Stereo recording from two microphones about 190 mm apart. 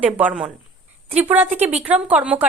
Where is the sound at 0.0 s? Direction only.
5° right (ahead or behind).